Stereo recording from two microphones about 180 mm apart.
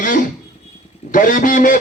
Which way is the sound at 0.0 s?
50° left (ahead or behind).